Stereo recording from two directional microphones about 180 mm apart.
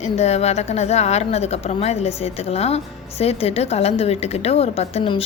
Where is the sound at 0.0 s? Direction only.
35° left (ahead or behind).